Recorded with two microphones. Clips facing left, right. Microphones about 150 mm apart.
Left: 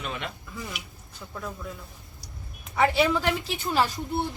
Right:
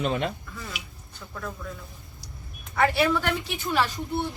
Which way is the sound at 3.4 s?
35° left (ahead or behind).